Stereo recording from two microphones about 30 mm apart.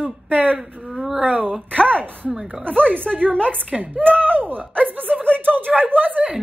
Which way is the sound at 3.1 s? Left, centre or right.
Right.